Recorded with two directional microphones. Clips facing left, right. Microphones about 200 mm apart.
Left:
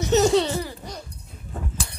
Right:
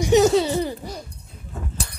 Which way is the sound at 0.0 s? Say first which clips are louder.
Right 3 dB; 10° right (ahead or behind).